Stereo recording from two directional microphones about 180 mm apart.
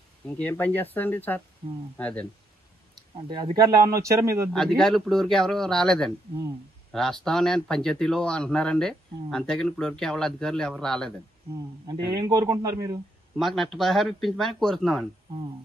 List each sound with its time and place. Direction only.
0.4 s speech: 10° left (ahead or behind)
3.3 s speech: 25° right (ahead or behind)
4.5 s speech: 5° left (ahead or behind)
11.9 s a man's voice: 20° right (ahead or behind)
13.4 s speech: centre (ahead or behind)